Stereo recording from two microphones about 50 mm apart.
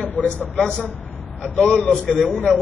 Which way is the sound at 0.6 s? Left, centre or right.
Centre.